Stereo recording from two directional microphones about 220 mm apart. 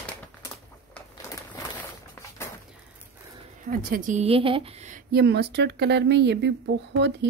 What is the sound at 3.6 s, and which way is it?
A woman's voice, 40° right (ahead or behind).